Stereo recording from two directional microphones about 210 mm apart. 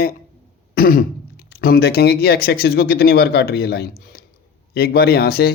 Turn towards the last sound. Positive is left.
turn(degrees=50)  # may be behind; listen again after turning